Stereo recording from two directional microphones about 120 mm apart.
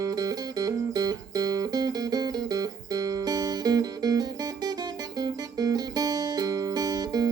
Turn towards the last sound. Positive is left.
turn(degrees=-30)  # may be behind; listen again after turning